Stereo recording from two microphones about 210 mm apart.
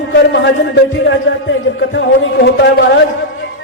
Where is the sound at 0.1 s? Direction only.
55° left (ahead or behind).